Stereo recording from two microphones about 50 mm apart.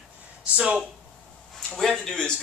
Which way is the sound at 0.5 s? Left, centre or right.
Centre.